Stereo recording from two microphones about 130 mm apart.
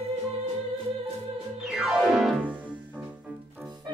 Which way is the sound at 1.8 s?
5° right (ahead or behind).